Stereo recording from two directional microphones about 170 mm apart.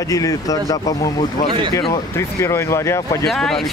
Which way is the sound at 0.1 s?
20° left (ahead or behind).